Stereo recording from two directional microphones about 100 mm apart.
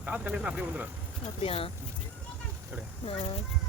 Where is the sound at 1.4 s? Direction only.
70° left (ahead or behind).